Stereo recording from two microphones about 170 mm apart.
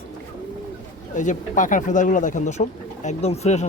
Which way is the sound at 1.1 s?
45° left (ahead or behind).